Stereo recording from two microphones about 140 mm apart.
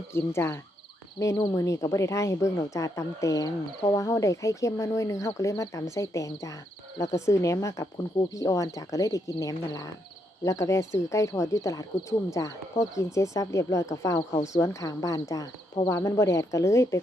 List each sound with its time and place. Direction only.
0.1 s speech: 15° left (ahead or behind)